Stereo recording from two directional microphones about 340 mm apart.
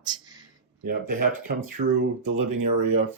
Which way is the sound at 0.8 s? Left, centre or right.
Right.